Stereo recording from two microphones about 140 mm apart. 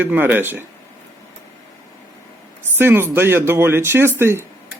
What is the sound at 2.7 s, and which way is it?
Speech, 15° right (ahead or behind).